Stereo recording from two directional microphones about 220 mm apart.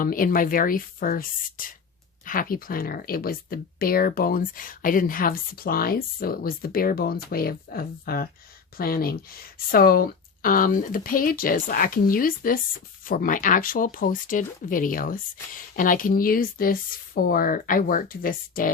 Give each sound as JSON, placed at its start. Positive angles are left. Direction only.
{"t": 0.0, "sound": "speech", "side_deg": 40}